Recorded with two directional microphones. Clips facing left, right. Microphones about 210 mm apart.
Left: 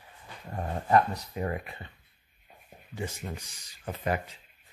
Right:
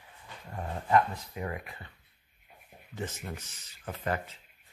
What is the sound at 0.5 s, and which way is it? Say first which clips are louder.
Speech: left 2 dB; 40° left (ahead or behind).